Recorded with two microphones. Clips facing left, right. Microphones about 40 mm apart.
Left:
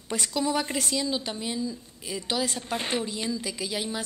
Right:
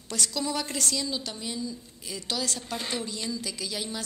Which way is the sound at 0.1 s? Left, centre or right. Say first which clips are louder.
Left 3 dB; left.